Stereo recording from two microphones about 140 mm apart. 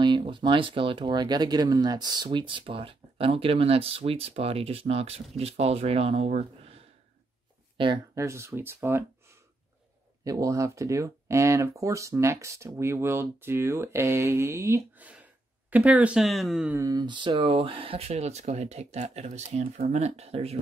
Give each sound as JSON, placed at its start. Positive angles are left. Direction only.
{"t": 0.0, "sound": "speech", "side_deg": -35}
{"t": 7.7, "sound": "a sound", "side_deg": -35}
{"t": 8.1, "sound": "speech", "side_deg": -20}
{"t": 16.7, "sound": "speech", "side_deg": -25}